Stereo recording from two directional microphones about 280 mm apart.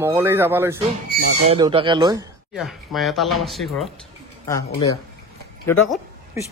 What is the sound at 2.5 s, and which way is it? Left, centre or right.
Speech, centre.